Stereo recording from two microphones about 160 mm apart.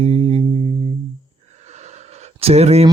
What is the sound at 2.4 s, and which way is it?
Speech, 40° right (ahead or behind).